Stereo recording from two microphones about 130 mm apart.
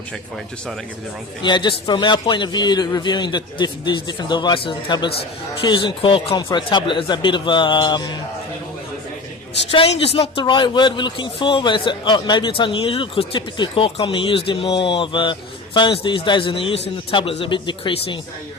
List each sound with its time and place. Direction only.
1.4 s speech: 35° left (ahead or behind)
9.7 s speech: 50° left (ahead or behind)